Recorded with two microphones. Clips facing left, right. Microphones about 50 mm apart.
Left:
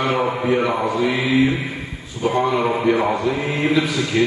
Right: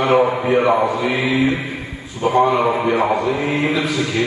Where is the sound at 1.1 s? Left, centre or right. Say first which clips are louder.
Even; right.